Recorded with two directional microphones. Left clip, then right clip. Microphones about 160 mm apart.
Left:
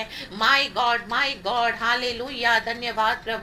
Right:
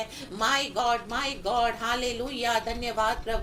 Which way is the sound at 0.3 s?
50° right (ahead or behind).